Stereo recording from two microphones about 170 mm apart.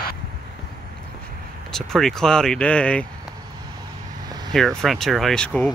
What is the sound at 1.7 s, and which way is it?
Speech, 5° left (ahead or behind).